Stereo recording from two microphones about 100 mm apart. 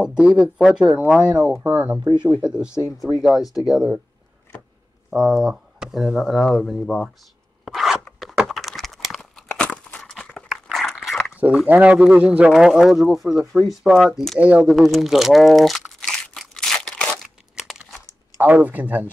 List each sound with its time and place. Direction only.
0.0 s a man's voice: 10° right (ahead or behind)
1.5 s a man's voice: 20° right (ahead or behind)
2.0 s speech: 45° right (ahead or behind)
2.3 s a man's voice: 10° right (ahead or behind)
5.1 s speech: 5° right (ahead or behind)
7.6 s zipper: centre (ahead or behind)
8.5 s a sound: centre (ahead or behind)
9.5 s a sound: 15° left (ahead or behind)
10.5 s dog: centre (ahead or behind)
11.6 s a man's voice: 15° right (ahead or behind); by 14.4 s centre (ahead or behind)
14.4 s a man's voice: 10° right (ahead or behind)
16.0 s crunch: 5° left (ahead or behind)
17.6 s crumpling: 5° right (ahead or behind)
18.4 s a man's voice: 15° right (ahead or behind)